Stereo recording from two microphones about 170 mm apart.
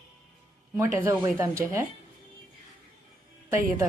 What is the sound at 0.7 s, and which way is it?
Speech, 15° right (ahead or behind).